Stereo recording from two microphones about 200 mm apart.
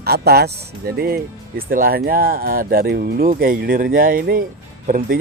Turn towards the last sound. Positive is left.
turn(degrees=-45)  # may be behind; listen again after turning